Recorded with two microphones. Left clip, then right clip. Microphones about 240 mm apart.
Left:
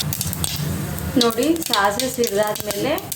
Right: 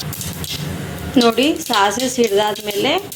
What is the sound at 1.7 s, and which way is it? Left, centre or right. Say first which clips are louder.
Speech: right 3 dB; centre.